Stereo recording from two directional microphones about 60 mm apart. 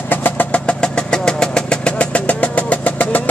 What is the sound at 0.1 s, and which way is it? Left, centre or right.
Vehicle, left.